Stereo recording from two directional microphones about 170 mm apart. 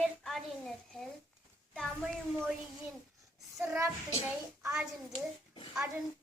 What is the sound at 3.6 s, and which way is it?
Child singing, centre (ahead or behind).